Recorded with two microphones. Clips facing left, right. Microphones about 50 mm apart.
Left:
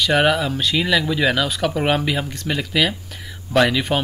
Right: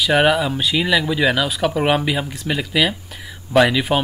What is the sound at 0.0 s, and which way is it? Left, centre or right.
Speech, centre.